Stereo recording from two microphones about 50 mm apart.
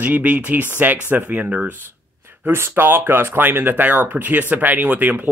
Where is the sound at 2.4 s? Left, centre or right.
Right.